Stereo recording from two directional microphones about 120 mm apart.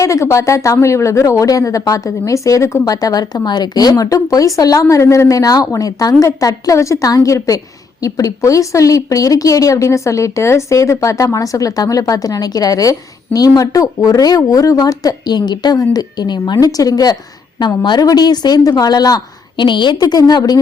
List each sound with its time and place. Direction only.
0.0 s a woman's voice: 25° left (ahead or behind)